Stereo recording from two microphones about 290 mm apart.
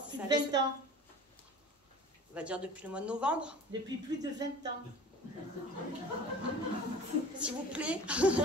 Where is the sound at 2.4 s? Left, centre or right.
Centre.